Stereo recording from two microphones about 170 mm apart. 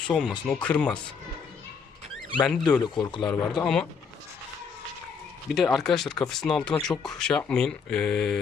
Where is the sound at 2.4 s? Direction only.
5° left (ahead or behind).